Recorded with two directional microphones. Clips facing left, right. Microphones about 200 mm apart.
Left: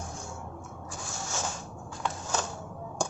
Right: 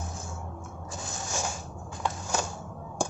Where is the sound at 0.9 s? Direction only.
15° right (ahead or behind).